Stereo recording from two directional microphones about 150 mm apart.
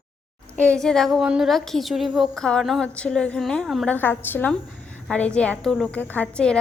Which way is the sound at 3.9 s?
15° left (ahead or behind).